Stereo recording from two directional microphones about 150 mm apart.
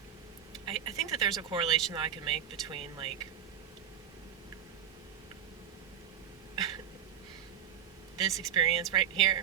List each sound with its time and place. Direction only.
0.6 s speech: 30° right (ahead or behind)
8.2 s speech: 25° right (ahead or behind)